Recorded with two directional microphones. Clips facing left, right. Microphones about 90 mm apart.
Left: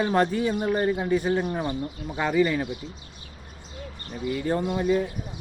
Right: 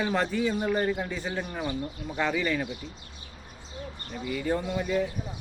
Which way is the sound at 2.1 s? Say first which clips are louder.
Left 5 dB; 10° left (ahead or behind).